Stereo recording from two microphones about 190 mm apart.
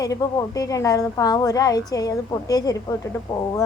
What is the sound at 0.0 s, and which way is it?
A woman's voice, 20° left (ahead or behind).